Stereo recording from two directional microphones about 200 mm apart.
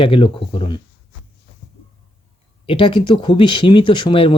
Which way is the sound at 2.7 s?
25° left (ahead or behind).